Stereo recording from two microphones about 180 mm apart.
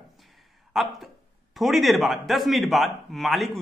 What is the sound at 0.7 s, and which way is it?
A man's voice, centre (ahead or behind).